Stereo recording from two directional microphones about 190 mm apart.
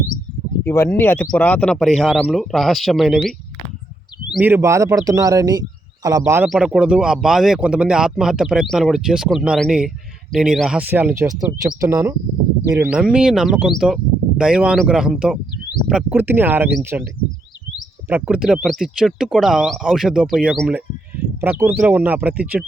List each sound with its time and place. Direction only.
0.6 s speech: 10° left (ahead or behind); by 6.5 s 15° right (ahead or behind)
6.5 s speech: 5° right (ahead or behind)
18.1 s speech: 5° right (ahead or behind)